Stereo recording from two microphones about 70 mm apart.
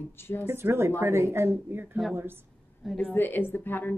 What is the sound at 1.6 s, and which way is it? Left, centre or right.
Speech, right.